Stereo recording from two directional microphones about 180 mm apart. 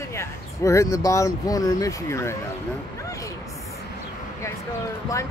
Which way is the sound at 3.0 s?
20° left (ahead or behind).